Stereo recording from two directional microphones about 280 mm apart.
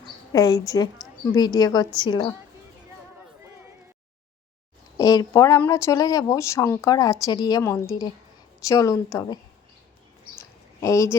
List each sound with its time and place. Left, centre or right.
0.3 s speech: centre
4.9 s speech: centre
10.3 s a sound: centre